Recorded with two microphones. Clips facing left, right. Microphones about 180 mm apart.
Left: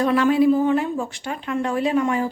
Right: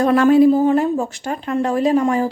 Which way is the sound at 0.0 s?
45° right (ahead or behind).